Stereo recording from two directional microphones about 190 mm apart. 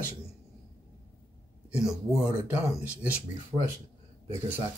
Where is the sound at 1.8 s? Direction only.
15° left (ahead or behind).